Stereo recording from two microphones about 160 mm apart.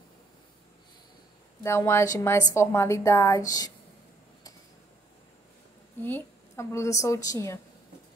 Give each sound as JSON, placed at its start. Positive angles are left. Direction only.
{"t": 1.6, "sound": "a woman's voice", "side_deg": 15}
{"t": 6.0, "sound": "a woman's voice", "side_deg": 15}